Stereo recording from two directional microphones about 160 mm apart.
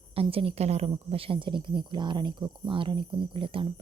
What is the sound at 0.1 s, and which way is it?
A woman's voice, 35° right (ahead or behind).